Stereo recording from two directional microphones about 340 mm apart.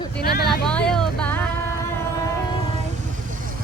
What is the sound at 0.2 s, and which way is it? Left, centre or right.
Vehicle, left.